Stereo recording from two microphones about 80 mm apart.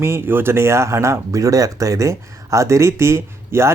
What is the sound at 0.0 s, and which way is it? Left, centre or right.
Speech, right.